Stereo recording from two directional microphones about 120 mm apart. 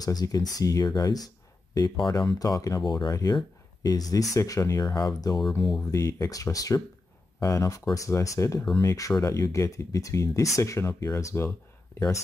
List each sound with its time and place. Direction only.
0.0 s speech: 35° left (ahead or behind)
5.9 s speech: 25° left (ahead or behind)